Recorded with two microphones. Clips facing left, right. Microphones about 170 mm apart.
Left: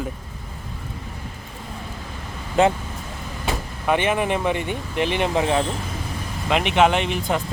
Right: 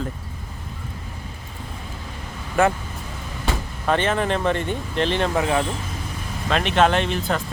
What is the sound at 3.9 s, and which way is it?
Speech, 10° left (ahead or behind).